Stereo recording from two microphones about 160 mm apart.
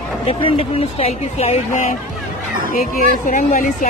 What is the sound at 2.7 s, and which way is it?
Speech, 55° left (ahead or behind).